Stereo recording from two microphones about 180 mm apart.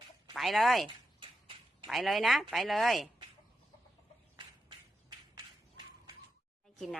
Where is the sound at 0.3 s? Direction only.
Centre (ahead or behind).